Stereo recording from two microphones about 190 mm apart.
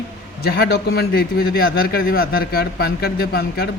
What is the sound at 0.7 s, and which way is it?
A man's voice, 55° left (ahead or behind).